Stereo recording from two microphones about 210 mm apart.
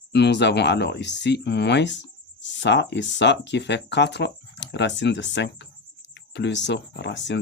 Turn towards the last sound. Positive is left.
turn(degrees=60)  # may be behind; listen again after turning